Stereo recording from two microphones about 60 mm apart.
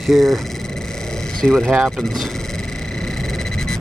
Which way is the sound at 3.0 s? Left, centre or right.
Centre.